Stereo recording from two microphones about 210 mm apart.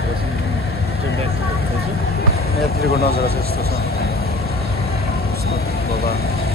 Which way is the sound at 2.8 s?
50° left (ahead or behind).